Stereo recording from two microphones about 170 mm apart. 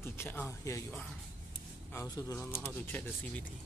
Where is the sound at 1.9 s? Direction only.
20° left (ahead or behind).